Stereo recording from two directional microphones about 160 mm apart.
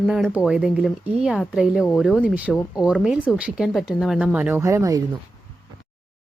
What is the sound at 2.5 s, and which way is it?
Speech, 20° left (ahead or behind).